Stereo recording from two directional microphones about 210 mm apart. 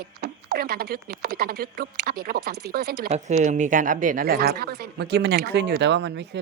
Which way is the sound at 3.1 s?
30° right (ahead or behind).